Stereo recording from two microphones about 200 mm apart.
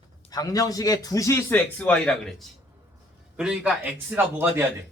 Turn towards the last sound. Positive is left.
turn(degrees=-10)  # may be behind; listen again after turning